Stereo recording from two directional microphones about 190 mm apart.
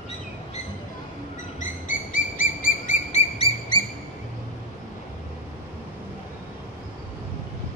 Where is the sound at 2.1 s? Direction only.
45° left (ahead or behind).